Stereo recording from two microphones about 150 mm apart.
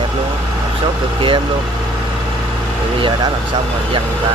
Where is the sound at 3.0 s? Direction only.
30° right (ahead or behind).